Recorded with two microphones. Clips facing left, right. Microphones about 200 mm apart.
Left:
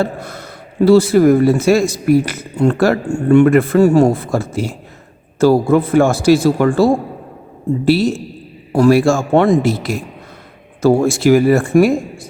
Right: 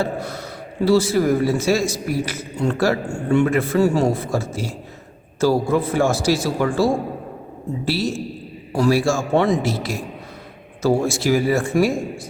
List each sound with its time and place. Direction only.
0.0 s a man's voice: 50° left (ahead or behind)
8.7 s a man's voice: 55° left (ahead or behind)